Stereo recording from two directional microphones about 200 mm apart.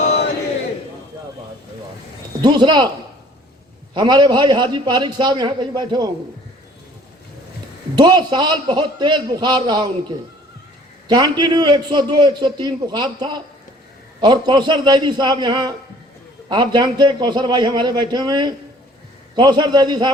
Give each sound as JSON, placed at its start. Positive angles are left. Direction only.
{"t": 2.4, "sound": "a man's voice", "side_deg": -20}
{"t": 3.9, "sound": "a man's voice", "side_deg": -20}
{"t": 7.9, "sound": "a man's voice", "side_deg": -20}